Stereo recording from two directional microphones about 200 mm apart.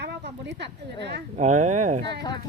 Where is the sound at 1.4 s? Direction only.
35° right (ahead or behind).